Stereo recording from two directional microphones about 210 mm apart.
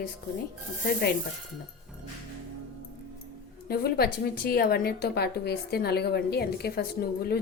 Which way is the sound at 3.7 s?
45° left (ahead or behind).